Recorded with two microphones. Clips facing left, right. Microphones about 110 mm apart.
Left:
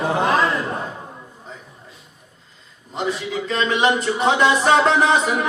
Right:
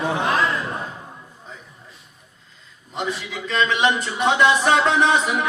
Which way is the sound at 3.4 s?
40° left (ahead or behind).